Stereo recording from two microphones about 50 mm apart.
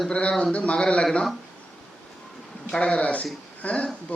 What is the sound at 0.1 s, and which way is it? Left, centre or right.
Speech, left.